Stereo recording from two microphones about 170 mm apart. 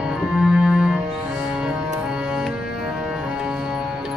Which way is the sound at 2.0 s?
5° right (ahead or behind).